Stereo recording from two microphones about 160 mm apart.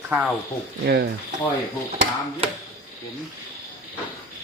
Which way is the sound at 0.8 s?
75° right (ahead or behind).